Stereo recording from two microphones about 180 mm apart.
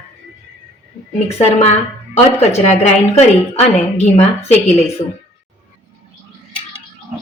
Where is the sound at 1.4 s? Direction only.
40° left (ahead or behind).